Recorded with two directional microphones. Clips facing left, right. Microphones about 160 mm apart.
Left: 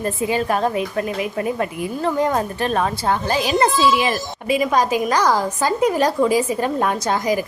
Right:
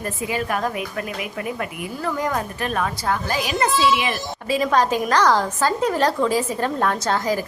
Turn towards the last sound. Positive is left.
turn(degrees=15)  # may be behind; listen again after turning